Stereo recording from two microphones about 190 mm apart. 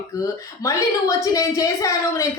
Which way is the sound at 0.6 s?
15° left (ahead or behind).